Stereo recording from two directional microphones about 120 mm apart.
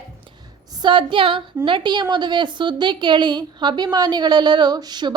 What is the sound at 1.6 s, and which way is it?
A woman's voice, 40° right (ahead or behind).